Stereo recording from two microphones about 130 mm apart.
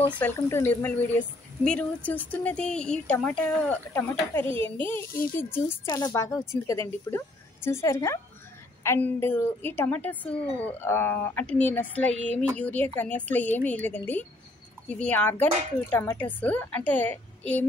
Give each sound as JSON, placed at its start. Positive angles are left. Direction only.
{"t": 0.2, "sound": "speech", "side_deg": 15}
{"t": 4.6, "sound": "a child's voice", "side_deg": -40}
{"t": 4.8, "sound": "a woman's voice", "side_deg": 15}